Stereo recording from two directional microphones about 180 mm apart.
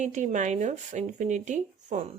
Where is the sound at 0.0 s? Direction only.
45° right (ahead or behind).